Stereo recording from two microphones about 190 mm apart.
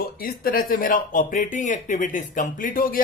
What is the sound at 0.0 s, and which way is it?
Speech, 50° left (ahead or behind).